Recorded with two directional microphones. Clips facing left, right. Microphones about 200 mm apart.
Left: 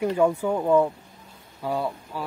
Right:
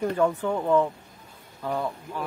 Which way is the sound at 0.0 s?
10° left (ahead or behind).